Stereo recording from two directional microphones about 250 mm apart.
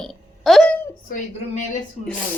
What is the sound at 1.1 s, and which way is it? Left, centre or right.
Speech, left.